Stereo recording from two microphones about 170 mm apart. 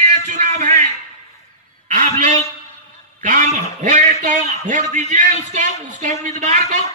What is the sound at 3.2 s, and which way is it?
A man's voice, 45° right (ahead or behind).